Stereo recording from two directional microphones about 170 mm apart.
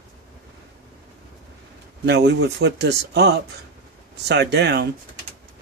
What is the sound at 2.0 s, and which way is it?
Speech, 80° right.